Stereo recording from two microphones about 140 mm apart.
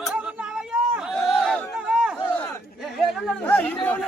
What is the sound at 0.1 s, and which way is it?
Chatter, 5° right (ahead or behind).